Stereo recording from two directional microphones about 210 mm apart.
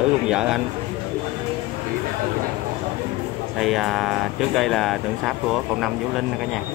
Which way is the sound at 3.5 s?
Centre (ahead or behind).